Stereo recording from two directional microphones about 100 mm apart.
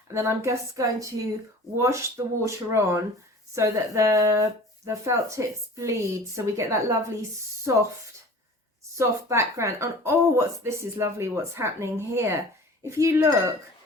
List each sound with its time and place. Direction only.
0.1 s speech: 30° right (ahead or behind)
9.0 s speech: 30° right (ahead or behind)